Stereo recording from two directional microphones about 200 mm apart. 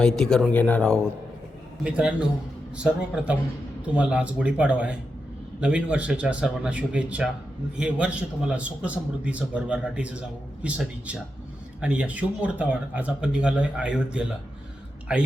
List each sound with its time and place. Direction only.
0.0 s a man's voice: 5° left (ahead or behind)
1.8 s a man's voice: 5° right (ahead or behind)